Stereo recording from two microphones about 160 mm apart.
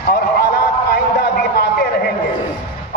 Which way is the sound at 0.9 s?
80° left.